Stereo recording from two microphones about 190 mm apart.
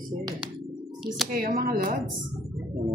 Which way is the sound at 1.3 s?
50° right (ahead or behind).